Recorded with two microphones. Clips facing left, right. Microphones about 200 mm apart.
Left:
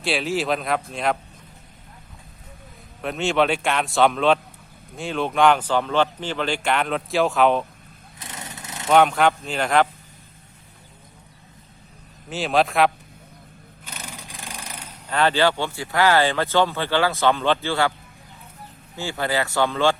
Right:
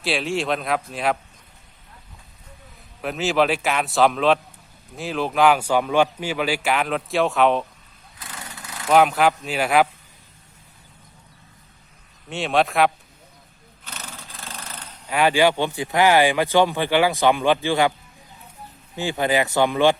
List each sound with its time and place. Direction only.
0.0 s speech: centre (ahead or behind)
3.0 s speech: 5° right (ahead or behind)
8.2 s lawn mower: 25° left (ahead or behind)
8.9 s speech: 5° right (ahead or behind)
12.3 s speech: centre (ahead or behind)
13.8 s roar: 10° left (ahead or behind)
15.0 s speech: 10° right (ahead or behind)
18.9 s speech: 20° right (ahead or behind)